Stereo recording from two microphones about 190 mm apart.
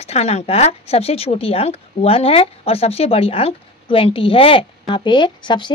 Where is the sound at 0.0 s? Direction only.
35° left (ahead or behind).